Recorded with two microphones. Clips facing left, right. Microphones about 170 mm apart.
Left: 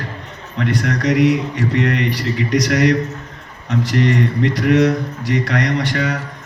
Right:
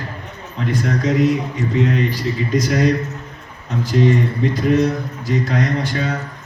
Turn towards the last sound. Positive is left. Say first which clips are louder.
# left 2 dB
turn(degrees=75)  # may be behind; listen again after turning